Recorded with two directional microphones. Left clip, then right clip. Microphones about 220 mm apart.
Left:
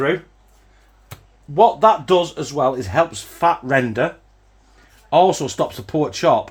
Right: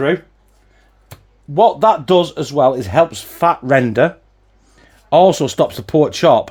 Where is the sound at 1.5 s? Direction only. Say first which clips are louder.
Right 2 dB; 40° right (ahead or behind).